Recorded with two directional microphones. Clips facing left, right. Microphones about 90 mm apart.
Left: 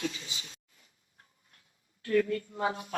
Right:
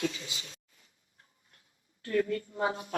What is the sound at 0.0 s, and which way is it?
Speech, 25° right (ahead or behind).